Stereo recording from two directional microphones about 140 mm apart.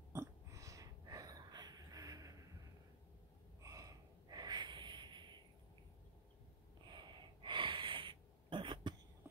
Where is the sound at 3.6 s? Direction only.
25° right (ahead or behind).